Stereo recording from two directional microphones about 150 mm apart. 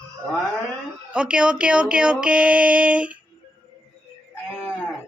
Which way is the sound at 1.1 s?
5° right (ahead or behind).